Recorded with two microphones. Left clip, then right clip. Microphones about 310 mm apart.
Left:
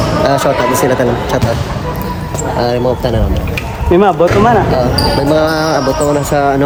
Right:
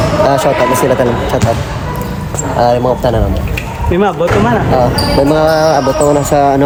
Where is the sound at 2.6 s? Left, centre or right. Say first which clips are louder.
Right 4 dB; centre.